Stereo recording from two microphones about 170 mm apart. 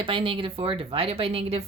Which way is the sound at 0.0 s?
30° right (ahead or behind).